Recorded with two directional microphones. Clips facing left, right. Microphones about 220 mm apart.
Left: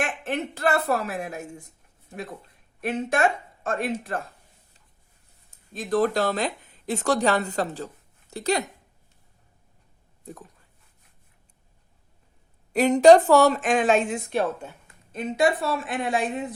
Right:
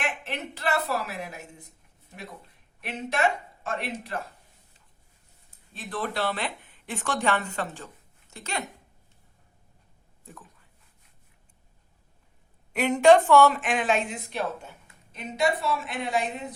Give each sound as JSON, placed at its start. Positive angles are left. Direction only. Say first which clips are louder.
{"t": 0.0, "sound": "a woman's voice", "louder": "left 5 dB", "side_deg": 45}
{"t": 2.8, "sound": "a woman's voice", "louder": "left 4 dB", "side_deg": 50}
{"t": 5.5, "sound": "speech", "louder": "left 11 dB", "side_deg": 45}
{"t": 12.7, "sound": "a woman's voice", "louder": "left 4 dB", "side_deg": 35}